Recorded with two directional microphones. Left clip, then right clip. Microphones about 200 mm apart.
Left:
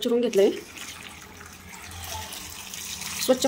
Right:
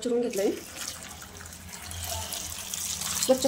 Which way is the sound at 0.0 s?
30° left (ahead or behind).